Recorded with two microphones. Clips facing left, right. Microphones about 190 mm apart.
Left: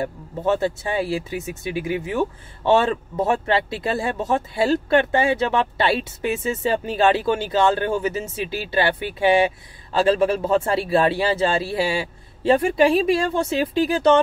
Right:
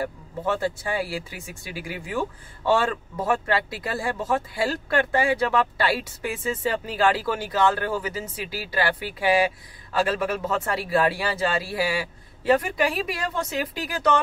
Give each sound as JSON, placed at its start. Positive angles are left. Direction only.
{"t": 0.0, "sound": "speech", "side_deg": 25}